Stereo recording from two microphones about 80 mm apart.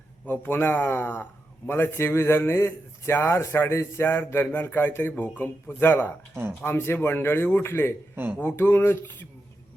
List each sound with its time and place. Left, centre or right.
0.3 s a man's voice: left
8.1 s speech: right
8.4 s a man's voice: left